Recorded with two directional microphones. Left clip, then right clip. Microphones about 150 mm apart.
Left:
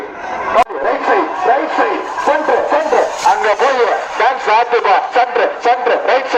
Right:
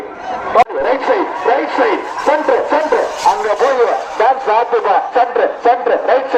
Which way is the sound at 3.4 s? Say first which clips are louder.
Even; 15° right (ahead or behind).